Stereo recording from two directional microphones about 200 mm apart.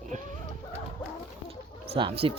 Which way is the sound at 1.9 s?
25° right (ahead or behind).